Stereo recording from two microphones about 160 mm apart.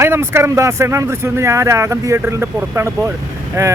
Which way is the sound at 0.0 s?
15° right (ahead or behind).